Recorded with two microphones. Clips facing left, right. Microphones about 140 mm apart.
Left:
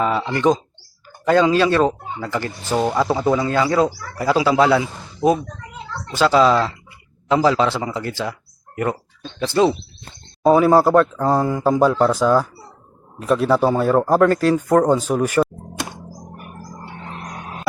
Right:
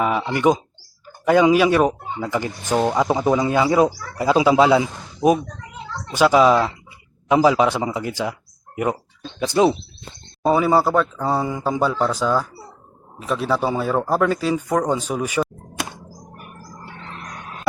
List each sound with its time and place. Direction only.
0.0 s speech: 10° right (ahead or behind)
10.4 s speech: centre (ahead or behind)